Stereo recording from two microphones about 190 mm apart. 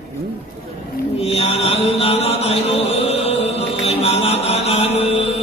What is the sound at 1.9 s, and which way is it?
Chant, 30° left (ahead or behind).